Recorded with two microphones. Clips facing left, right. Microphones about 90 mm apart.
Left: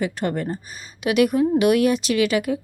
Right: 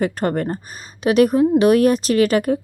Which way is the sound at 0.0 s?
45° right (ahead or behind).